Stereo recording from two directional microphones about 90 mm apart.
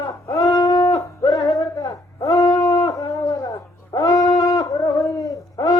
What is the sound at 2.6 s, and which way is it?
Brass instrument, 40° left (ahead or behind).